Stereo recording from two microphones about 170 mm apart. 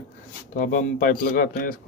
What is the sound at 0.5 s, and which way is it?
A man's voice, 50° left (ahead or behind).